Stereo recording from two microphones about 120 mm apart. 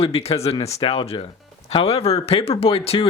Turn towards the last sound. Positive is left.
turn(degrees=55)  # may be behind; listen again after turning